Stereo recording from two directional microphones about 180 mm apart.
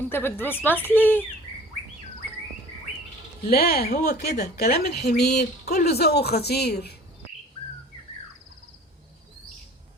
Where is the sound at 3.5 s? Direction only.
55° left (ahead or behind).